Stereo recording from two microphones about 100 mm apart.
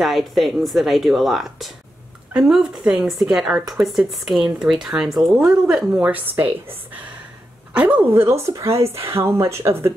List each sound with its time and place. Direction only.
0.0 s speech: centre (ahead or behind); by 9.9 s 25° right (ahead or behind)